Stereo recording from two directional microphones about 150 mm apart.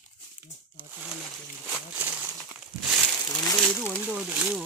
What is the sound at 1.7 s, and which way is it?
Speech, 10° right (ahead or behind).